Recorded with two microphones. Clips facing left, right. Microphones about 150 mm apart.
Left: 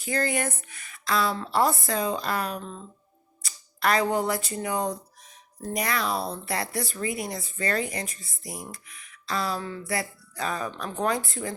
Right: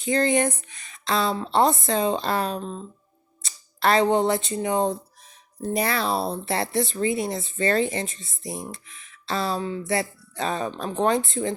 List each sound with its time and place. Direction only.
0.0 s speech: 25° right (ahead or behind)